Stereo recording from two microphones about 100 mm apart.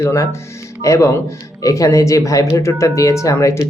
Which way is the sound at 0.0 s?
30° left (ahead or behind).